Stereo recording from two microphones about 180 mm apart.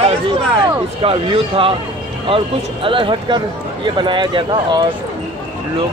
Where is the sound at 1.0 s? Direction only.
30° right (ahead or behind).